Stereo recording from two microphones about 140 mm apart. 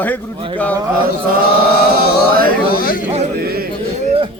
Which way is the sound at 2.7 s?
90° left.